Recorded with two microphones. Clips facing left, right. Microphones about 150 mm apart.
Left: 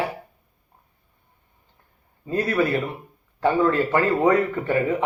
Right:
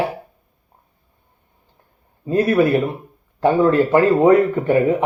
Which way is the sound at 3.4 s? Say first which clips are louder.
Right 5 dB; 15° right (ahead or behind).